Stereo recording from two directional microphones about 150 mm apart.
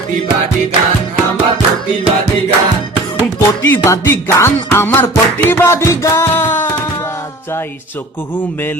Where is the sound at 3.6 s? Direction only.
20° left (ahead or behind).